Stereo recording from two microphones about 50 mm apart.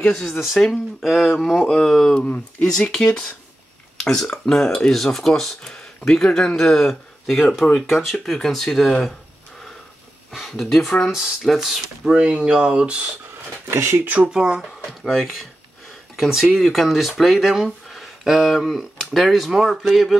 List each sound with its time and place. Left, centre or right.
0.0 s speech: centre
1.7 s speech: centre
10.6 s speech: centre
11.1 s speech: centre
13.7 s speech: right
14.0 s speech: right
14.3 s speech: centre
14.6 s speech: centre